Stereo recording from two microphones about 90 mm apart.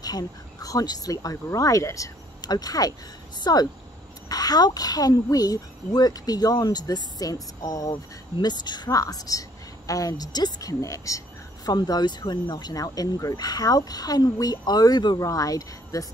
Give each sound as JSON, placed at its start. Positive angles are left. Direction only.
{"t": 0.0, "sound": "a woman's voice", "side_deg": 45}
{"t": 7.9, "sound": "a woman's voice", "side_deg": 55}
{"t": 15.1, "sound": "speech", "side_deg": 40}